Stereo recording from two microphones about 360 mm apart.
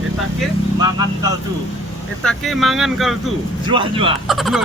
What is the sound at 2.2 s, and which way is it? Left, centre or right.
Speech, centre.